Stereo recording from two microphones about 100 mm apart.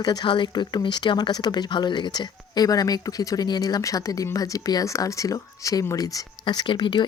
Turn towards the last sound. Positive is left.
turn(degrees=50)  # may be behind; listen again after turning